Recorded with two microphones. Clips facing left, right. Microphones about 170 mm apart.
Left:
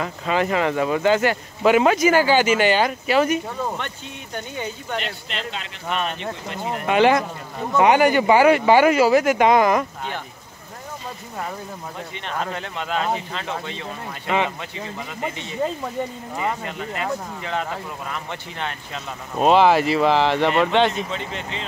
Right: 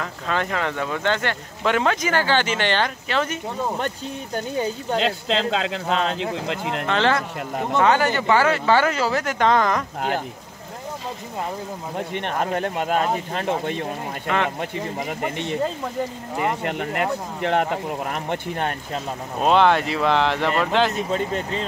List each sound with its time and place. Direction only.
0.0 s speech: 5° left (ahead or behind)
3.7 s speech: 35° right (ahead or behind)
5.0 s speech: 90° right
6.9 s speech: 15° left (ahead or behind)
12.1 s speech: 55° right (ahead or behind)
16.6 s speech: 60° right (ahead or behind)
19.4 s speech: 5° left (ahead or behind)
21.1 s speech: 45° right (ahead or behind)